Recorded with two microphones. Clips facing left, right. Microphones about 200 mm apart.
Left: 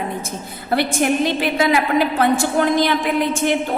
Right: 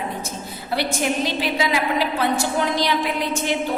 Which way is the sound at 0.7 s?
50° left (ahead or behind).